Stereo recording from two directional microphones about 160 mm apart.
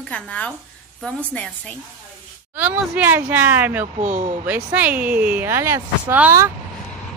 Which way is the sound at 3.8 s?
50° right (ahead or behind).